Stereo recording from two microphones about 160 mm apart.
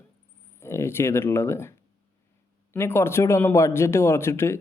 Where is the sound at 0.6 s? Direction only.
15° left (ahead or behind).